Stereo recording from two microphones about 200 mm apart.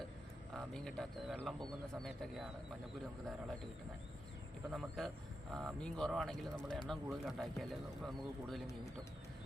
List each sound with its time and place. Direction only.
0.5 s speech: 5° left (ahead or behind)
4.7 s speech: centre (ahead or behind)